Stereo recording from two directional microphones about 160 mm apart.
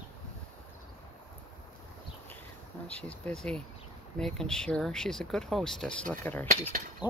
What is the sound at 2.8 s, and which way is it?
Speech, 5° left (ahead or behind).